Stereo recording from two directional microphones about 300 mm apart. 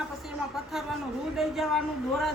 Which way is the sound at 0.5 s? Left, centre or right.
Centre.